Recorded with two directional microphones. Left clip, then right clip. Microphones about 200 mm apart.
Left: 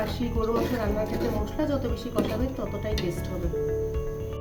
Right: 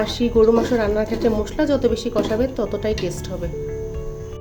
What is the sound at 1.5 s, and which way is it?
Speech, 50° right (ahead or behind).